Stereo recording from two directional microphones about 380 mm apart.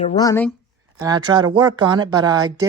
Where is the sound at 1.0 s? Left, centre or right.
Centre.